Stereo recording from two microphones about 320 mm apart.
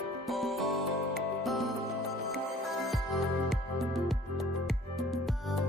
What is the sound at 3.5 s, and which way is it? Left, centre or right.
Music, centre.